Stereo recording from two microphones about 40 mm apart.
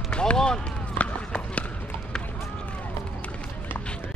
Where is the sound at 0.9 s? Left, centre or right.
Left.